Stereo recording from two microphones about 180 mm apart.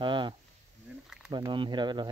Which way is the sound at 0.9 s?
5° right (ahead or behind).